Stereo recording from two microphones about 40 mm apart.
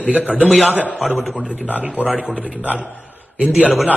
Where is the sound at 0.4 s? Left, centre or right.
Centre.